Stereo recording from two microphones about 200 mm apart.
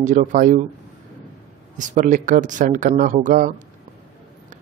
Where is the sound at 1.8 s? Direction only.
40° right (ahead or behind).